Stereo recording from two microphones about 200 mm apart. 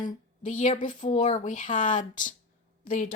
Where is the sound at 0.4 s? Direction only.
40° left (ahead or behind).